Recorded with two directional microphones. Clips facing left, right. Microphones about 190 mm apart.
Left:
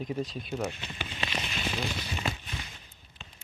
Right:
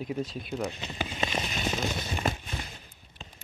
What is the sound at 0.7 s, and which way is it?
Speech, 35° right (ahead or behind).